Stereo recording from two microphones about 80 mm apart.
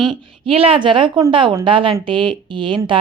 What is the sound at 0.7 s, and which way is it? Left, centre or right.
A woman's voice, right.